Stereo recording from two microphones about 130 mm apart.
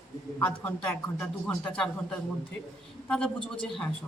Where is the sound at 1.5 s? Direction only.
5° left (ahead or behind).